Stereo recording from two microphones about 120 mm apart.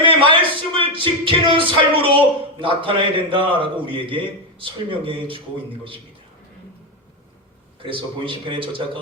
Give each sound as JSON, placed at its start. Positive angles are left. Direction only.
{"t": 0.0, "sound": "speech", "side_deg": -45}
{"t": 7.8, "sound": "speech", "side_deg": -45}